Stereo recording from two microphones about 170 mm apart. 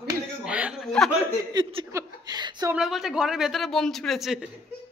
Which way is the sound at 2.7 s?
5° right (ahead or behind).